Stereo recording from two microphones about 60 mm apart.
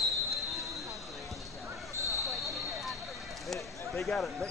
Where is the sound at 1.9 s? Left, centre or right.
Right.